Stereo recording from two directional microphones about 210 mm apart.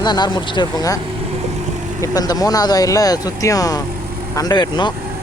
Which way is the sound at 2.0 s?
15° left (ahead or behind).